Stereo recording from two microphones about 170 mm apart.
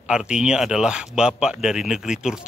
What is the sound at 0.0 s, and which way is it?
A man's voice, 5° right (ahead or behind).